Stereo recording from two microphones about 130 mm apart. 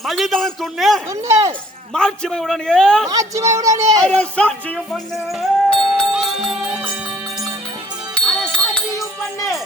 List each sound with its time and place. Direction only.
0.0 s a man's voice: centre (ahead or behind)
1.1 s speech: 25° right (ahead or behind)
1.9 s a man's voice: 5° left (ahead or behind)
3.1 s speech: 25° right (ahead or behind)
4.0 s music: 10° left (ahead or behind); by 6.9 s 10° right (ahead or behind)
8.1 s music: 5° left (ahead or behind)